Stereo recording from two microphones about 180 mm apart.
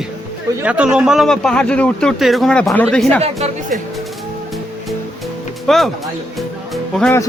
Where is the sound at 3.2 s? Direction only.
35° right (ahead or behind).